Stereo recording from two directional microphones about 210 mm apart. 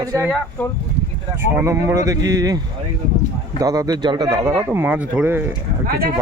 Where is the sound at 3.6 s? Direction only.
15° right (ahead or behind).